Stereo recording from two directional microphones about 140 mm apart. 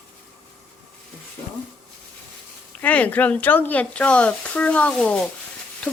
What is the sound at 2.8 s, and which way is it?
Speech, 10° left (ahead or behind).